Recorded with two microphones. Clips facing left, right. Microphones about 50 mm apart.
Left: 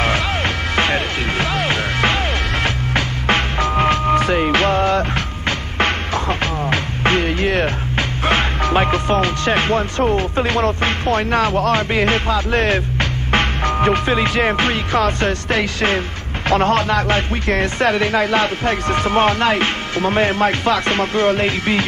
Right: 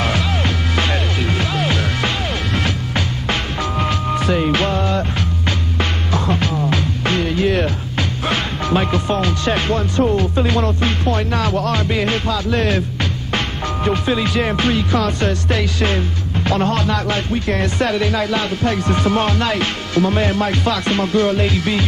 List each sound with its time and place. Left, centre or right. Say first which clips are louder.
0.7 s music: left 4 dB; left
9.9 s speech: right 1 dB; left
13.3 s music: left 7 dB; left
16.4 s speech: left 3 dB; left